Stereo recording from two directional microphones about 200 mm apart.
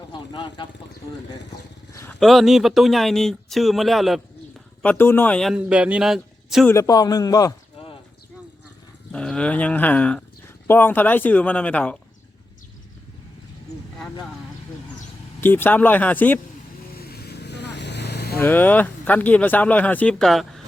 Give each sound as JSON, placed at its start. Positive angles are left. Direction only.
{"t": 0.1, "sound": "speech", "side_deg": 25}
{"t": 1.9, "sound": "a sound", "side_deg": 15}
{"t": 2.1, "sound": "speech", "side_deg": 0}
{"t": 6.7, "sound": "a man's voice", "side_deg": 15}
{"t": 9.1, "sound": "speech", "side_deg": 5}
{"t": 15.4, "sound": "speech", "side_deg": 10}
{"t": 16.9, "sound": "vehicle", "side_deg": 50}
{"t": 18.3, "sound": "speech", "side_deg": 10}